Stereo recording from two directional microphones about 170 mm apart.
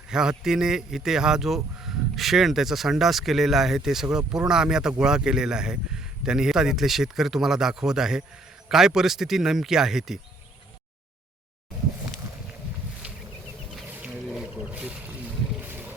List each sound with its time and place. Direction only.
0.1 s speech: 5° right (ahead or behind)
13.7 s wild animals: 5° right (ahead or behind)
15.5 s a sound: 10° right (ahead or behind)